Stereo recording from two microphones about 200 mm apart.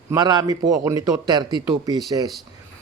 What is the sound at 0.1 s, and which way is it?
A man's voice, 20° right (ahead or behind).